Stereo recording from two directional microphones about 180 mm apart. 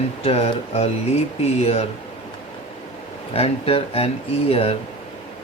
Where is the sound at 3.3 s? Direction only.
35° left (ahead or behind).